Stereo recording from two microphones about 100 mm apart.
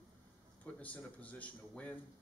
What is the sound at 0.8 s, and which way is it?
Speech, 15° left (ahead or behind).